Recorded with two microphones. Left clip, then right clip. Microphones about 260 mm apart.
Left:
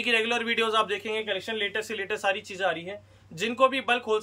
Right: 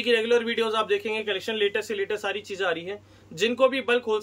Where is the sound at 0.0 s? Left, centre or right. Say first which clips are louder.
Right 3 dB; centre.